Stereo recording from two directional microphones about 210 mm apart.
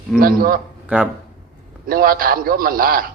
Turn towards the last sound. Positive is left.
turn(degrees=-45)  # may be behind; listen again after turning